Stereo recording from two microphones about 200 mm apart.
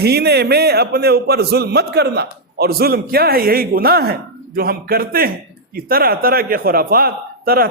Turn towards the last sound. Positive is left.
turn(degrees=-50)  # may be behind; listen again after turning